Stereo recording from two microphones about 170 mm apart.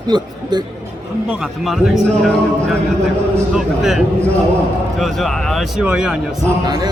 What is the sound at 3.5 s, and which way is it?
A man's voice, centre (ahead or behind).